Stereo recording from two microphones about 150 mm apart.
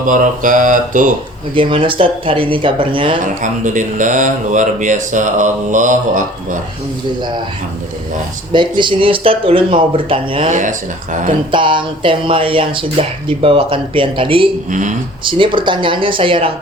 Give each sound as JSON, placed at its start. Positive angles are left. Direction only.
{"t": 0.1, "sound": "speech", "side_deg": -60}
{"t": 1.5, "sound": "speech", "side_deg": -35}
{"t": 3.2, "sound": "speech", "side_deg": -55}
{"t": 7.2, "sound": "speech", "side_deg": -30}
{"t": 8.5, "sound": "speech", "side_deg": -30}
{"t": 10.5, "sound": "speech", "side_deg": -60}
{"t": 11.5, "sound": "speech", "side_deg": -35}
{"t": 14.7, "sound": "speech", "side_deg": -55}
{"t": 15.2, "sound": "speech", "side_deg": -35}